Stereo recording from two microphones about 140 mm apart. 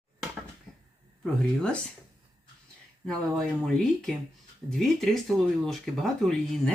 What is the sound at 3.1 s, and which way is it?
Speech, 5° left (ahead or behind).